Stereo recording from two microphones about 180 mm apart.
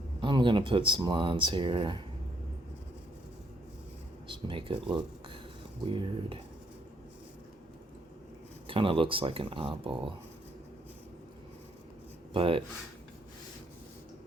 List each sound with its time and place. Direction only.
0.2 s speech: 25° right (ahead or behind)
4.3 s speech: 30° right (ahead or behind)
8.6 s speech: 30° right (ahead or behind)
12.3 s speech: 30° right (ahead or behind)